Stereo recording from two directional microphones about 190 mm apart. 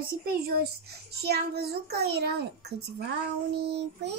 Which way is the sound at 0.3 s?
55° right (ahead or behind).